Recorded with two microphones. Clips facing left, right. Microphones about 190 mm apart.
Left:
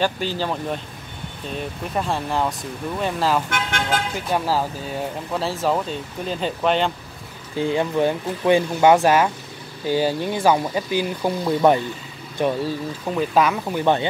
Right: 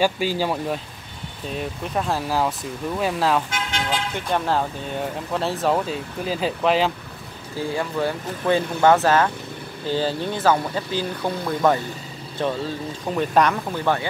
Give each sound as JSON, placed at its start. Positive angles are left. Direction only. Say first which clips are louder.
{"t": 0.0, "sound": "speech", "louder": "right 2 dB", "side_deg": -10}
{"t": 3.4, "sound": "vehicle", "louder": "left 2 dB", "side_deg": 60}
{"t": 4.1, "sound": "speech", "louder": "even", "side_deg": 5}
{"t": 7.5, "sound": "speech", "louder": "left 4 dB", "side_deg": 20}
{"t": 13.1, "sound": "speech", "louder": "even", "side_deg": 0}
{"t": 13.7, "sound": "speech", "louder": "left 5 dB", "side_deg": 20}